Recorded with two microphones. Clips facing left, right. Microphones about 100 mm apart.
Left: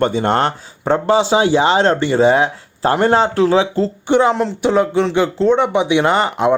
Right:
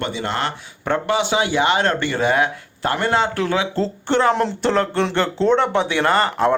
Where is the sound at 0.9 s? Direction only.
30° left (ahead or behind).